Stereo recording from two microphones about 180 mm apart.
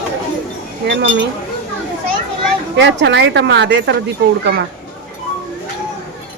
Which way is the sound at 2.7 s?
80° right.